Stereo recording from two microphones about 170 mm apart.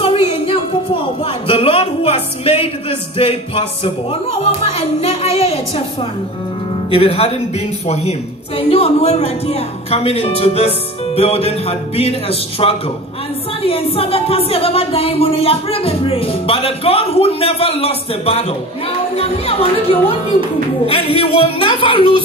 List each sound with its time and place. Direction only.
0.0 s a sound: 30° left (ahead or behind)
3.2 s speech: 35° left (ahead or behind)
6.9 s speech: 35° left (ahead or behind)